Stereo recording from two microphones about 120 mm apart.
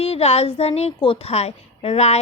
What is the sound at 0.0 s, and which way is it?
A woman's voice, 60° left (ahead or behind).